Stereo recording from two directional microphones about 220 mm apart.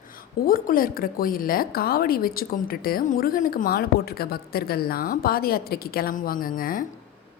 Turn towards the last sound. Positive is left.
turn(degrees=40)  # may be behind; listen again after turning